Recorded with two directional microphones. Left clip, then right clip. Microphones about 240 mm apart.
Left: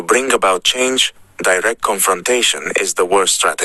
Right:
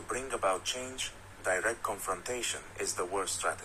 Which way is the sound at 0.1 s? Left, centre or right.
Left.